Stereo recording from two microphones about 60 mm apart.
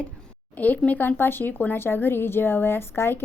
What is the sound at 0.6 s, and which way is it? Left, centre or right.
Speech, left.